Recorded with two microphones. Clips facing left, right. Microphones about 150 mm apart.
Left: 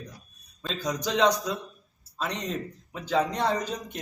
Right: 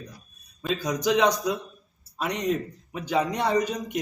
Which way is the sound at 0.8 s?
10° right (ahead or behind).